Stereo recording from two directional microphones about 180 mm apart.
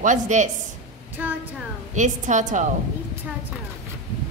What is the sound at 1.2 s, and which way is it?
Speech, 10° right (ahead or behind).